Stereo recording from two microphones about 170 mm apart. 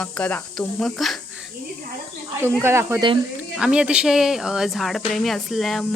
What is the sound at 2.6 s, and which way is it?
Speech, 15° right (ahead or behind).